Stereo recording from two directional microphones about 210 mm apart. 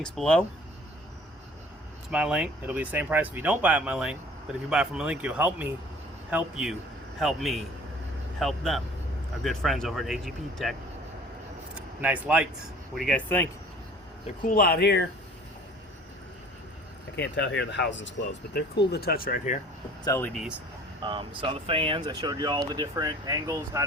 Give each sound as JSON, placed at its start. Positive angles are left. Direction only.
{"t": 0.0, "sound": "speech", "side_deg": 5}
{"t": 2.0, "sound": "speech", "side_deg": -5}
{"t": 11.7, "sound": "a sound", "side_deg": -5}
{"t": 12.9, "sound": "speech", "side_deg": 0}
{"t": 14.4, "sound": "speech", "side_deg": 45}
{"t": 17.2, "sound": "speech", "side_deg": 55}
{"t": 20.1, "sound": "speech", "side_deg": 10}
{"t": 21.0, "sound": "speech", "side_deg": -25}